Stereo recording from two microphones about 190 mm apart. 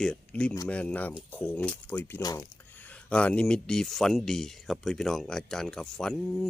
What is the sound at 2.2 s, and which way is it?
Speech, 20° left (ahead or behind).